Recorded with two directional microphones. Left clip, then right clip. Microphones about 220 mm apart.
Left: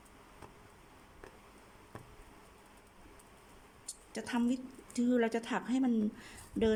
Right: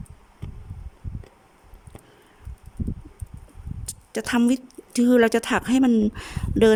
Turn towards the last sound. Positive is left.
turn(degrees=-50)  # may be behind; listen again after turning